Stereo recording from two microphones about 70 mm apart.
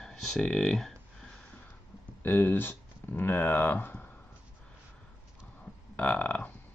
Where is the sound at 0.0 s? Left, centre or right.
Centre.